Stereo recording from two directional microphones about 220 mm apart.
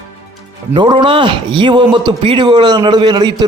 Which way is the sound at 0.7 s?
20° right (ahead or behind).